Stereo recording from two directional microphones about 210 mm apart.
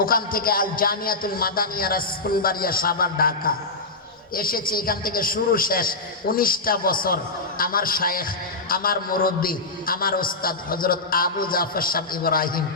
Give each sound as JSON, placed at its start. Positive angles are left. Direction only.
{"t": 0.0, "sound": "a man's voice", "side_deg": 45}